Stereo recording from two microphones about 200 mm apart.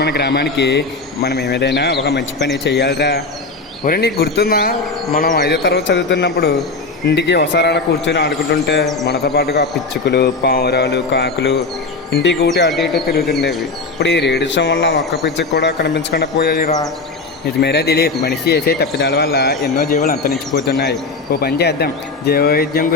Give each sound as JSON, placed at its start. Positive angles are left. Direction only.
{"t": 0.0, "sound": "speech", "side_deg": 55}
{"t": 5.6, "sound": "speech", "side_deg": 60}